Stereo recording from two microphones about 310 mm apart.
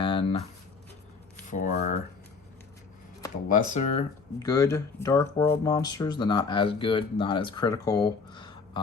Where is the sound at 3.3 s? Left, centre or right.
Left.